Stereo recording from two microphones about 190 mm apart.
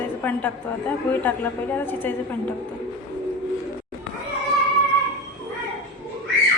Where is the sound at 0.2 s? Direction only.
10° left (ahead or behind).